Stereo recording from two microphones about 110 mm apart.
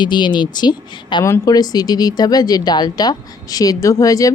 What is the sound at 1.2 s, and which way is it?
Speech, 30° left (ahead or behind).